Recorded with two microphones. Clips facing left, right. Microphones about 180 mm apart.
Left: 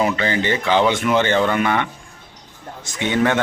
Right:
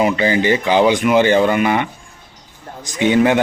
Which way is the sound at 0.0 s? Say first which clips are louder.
Right 4 dB; 15° right (ahead or behind).